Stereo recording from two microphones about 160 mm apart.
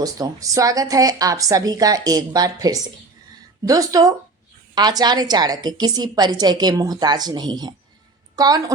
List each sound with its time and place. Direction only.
0.0 s a woman's voice: 20° right (ahead or behind)